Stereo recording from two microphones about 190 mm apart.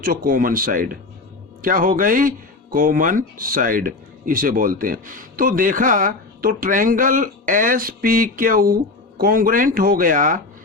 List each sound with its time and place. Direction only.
0.0 s speech: 45° right (ahead or behind)